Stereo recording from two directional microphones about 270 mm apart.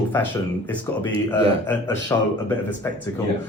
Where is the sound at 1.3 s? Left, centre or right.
Centre.